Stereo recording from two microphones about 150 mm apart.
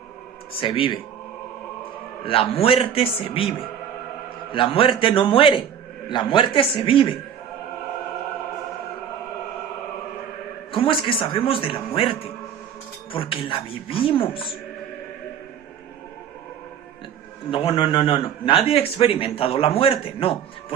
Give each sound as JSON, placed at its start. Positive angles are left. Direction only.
{"t": 0.5, "sound": "a man's voice", "side_deg": 35}
{"t": 4.5, "sound": "a man's voice", "side_deg": 35}
{"t": 10.7, "sound": "a man's voice", "side_deg": 35}
{"t": 17.5, "sound": "a man's voice", "side_deg": 35}